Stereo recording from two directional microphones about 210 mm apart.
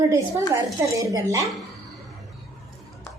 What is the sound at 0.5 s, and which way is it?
Speech, 15° right (ahead or behind).